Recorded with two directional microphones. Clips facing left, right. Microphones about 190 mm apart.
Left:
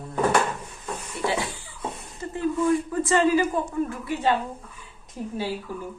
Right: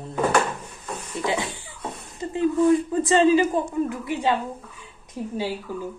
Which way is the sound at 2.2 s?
20° right (ahead or behind).